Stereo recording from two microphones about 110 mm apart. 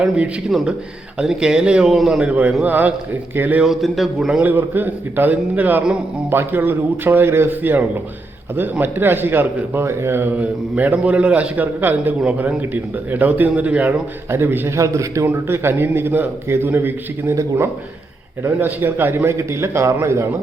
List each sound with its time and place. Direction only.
0.5 s a man's voice: centre (ahead or behind)
3.7 s a man's voice: centre (ahead or behind); by 20.2 s 25° right (ahead or behind)